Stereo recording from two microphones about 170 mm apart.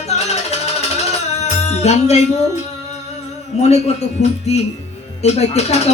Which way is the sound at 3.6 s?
40° left (ahead or behind).